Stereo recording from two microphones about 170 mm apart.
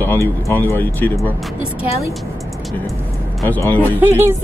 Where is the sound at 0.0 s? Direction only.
10° left (ahead or behind).